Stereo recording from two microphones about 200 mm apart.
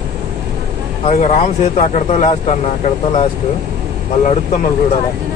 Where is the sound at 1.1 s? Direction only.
35° left (ahead or behind).